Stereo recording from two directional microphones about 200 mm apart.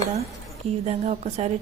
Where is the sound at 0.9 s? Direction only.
35° right (ahead or behind).